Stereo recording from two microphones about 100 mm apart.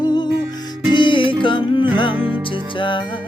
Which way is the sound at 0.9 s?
55° left (ahead or behind).